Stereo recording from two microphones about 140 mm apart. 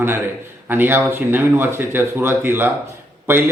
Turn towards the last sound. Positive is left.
turn(degrees=-15)  # may be behind; listen again after turning